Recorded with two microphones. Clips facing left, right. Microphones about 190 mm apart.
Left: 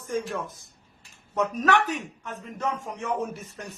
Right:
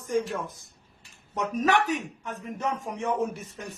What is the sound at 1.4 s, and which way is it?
A man's voice, 15° right (ahead or behind).